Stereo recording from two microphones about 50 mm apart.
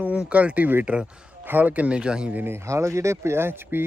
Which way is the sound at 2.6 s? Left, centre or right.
Right.